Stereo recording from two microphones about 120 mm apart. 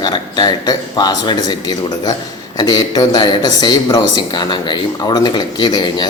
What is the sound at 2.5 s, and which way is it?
Speech, 35° left (ahead or behind).